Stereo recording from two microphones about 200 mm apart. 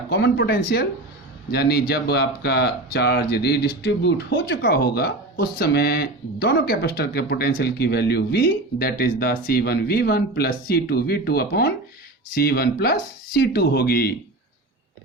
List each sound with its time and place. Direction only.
0.1 s speech: 55° left (ahead or behind)